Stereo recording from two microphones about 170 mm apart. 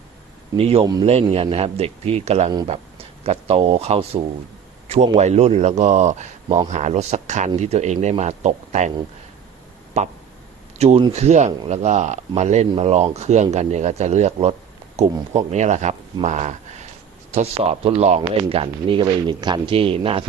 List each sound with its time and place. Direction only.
0.5 s speech: 35° right (ahead or behind)
10.0 s speech: 40° right (ahead or behind)